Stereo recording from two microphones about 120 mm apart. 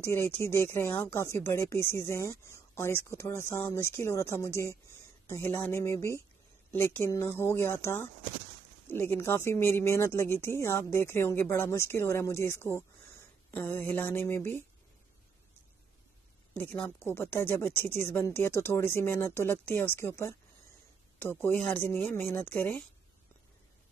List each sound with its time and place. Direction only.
0.0 s speech: 20° left (ahead or behind)
16.5 s speech: 15° left (ahead or behind)